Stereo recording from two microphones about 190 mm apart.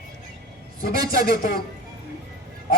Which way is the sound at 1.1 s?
50° left (ahead or behind).